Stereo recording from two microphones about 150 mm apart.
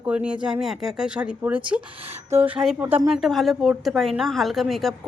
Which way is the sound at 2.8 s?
15° right (ahead or behind).